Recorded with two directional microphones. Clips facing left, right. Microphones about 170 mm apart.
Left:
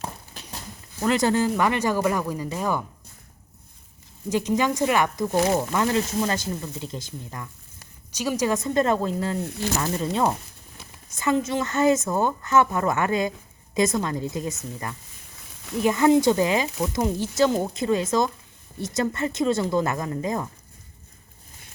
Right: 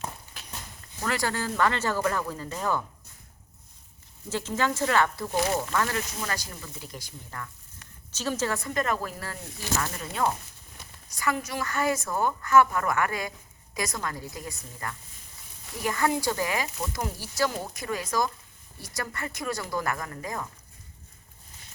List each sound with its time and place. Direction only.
1.0 s speech: 20° left (ahead or behind)
4.3 s speech: 15° left (ahead or behind)
9.4 s speech: 65° left (ahead or behind)
9.8 s speech: 25° left (ahead or behind)